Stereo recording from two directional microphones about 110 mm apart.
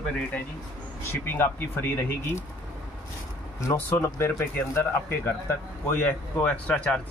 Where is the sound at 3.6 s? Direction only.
25° left (ahead or behind).